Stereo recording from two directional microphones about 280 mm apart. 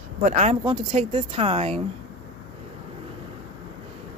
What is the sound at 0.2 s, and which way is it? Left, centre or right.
Speech, right.